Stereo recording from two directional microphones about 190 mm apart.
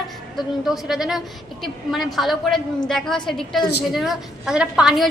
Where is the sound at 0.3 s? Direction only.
Centre (ahead or behind).